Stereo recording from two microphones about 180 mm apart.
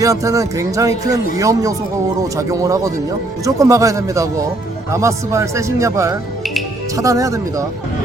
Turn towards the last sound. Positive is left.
turn(degrees=-20)  # may be behind; listen again after turning